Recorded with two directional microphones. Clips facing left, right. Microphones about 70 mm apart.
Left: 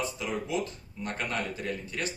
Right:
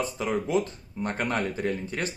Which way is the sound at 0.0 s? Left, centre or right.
Right.